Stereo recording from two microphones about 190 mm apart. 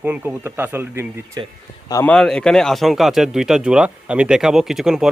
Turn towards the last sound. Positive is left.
turn(degrees=-5)  # may be behind; listen again after turning